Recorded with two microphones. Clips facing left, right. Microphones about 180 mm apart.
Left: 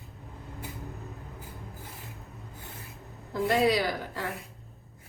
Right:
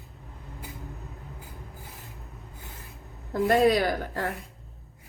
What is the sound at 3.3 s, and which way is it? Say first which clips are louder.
Speech: right 4 dB; 50° right (ahead or behind).